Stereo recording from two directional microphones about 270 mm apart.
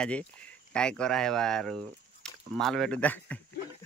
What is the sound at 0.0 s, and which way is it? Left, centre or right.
Speech, centre.